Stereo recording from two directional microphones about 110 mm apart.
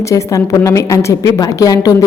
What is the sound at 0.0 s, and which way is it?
Speech, 30° left (ahead or behind).